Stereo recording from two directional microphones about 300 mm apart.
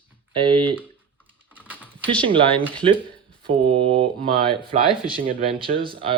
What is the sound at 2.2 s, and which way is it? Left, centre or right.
Speech, centre.